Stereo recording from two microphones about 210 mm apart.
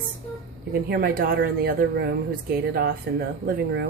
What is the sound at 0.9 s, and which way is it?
Speech, 45° right (ahead or behind).